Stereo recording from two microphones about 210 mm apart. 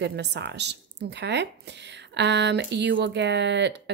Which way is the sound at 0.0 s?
55° right (ahead or behind).